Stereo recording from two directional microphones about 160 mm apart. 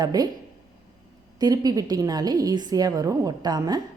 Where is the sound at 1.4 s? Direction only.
25° right (ahead or behind).